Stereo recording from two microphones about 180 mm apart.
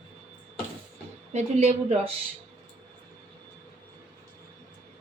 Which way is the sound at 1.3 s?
35° right (ahead or behind).